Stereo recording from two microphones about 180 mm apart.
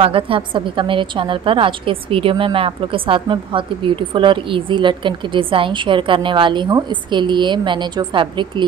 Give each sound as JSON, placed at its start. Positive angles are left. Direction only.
{"t": 0.0, "sound": "a woman's voice", "side_deg": -30}